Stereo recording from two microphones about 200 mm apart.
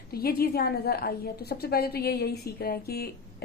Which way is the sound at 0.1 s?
50° left (ahead or behind).